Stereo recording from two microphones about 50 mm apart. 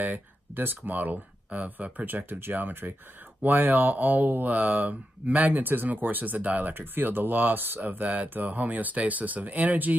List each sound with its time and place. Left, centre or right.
0.0 s speech: right
6.7 s speech: right